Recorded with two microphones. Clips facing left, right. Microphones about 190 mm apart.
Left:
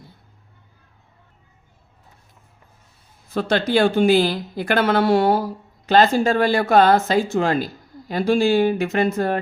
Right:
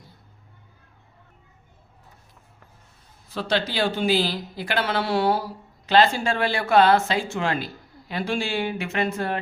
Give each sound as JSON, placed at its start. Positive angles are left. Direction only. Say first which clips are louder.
{"t": 3.2, "sound": "a man's voice", "louder": "left 5 dB", "side_deg": 50}